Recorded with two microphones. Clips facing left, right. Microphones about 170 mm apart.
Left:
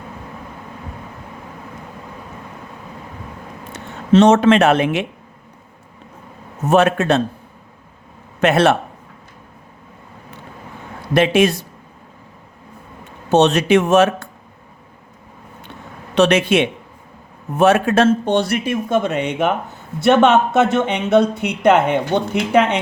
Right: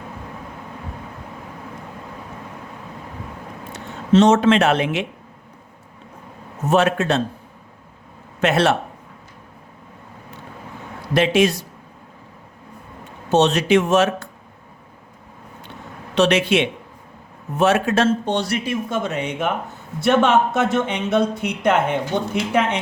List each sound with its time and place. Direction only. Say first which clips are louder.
3.7 s speech: left 2 dB; 60° left (ahead or behind)
6.7 s speech: left 3 dB; 55° left (ahead or behind)
8.4 s speech: left 4 dB; 55° left (ahead or behind)
11.1 s speech: left 2 dB; 55° left (ahead or behind)
13.3 s speech: left 3 dB; 55° left (ahead or behind)
16.1 s speech: left 3 dB; 50° left (ahead or behind)